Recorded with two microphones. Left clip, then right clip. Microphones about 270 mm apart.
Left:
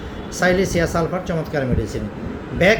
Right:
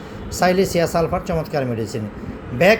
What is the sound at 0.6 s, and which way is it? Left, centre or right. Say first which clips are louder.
Speech: right 2 dB; centre.